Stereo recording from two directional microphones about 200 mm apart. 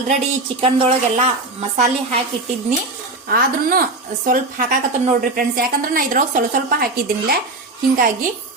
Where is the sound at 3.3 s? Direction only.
45° right (ahead or behind).